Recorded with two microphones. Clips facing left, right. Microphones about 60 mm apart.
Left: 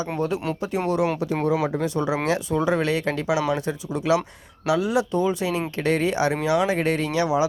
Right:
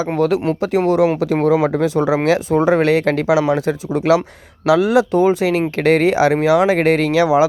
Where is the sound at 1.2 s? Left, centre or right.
Right.